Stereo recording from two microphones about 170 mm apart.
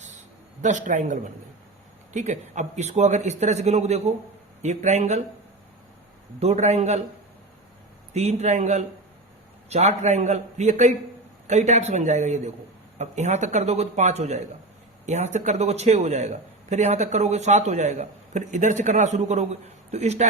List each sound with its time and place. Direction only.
0.6 s a man's voice: 45° right (ahead or behind)
6.4 s a man's voice: 40° right (ahead or behind)
8.1 s a man's voice: 40° right (ahead or behind)